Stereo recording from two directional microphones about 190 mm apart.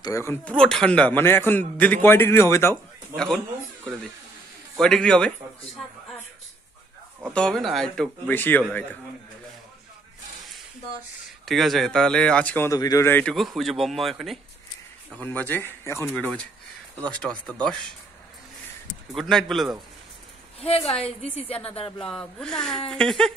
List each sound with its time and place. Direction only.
0.0 s speech: 15° left (ahead or behind)
4.7 s speech: 5° left (ahead or behind)
7.3 s speech: 5° left (ahead or behind)
11.2 s speech: centre (ahead or behind)
19.1 s speech: centre (ahead or behind)
20.6 s a woman's voice: 30° left (ahead or behind)
22.0 s speech: 5° left (ahead or behind)